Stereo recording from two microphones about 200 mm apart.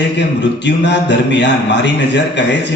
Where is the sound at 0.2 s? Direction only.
60° left (ahead or behind).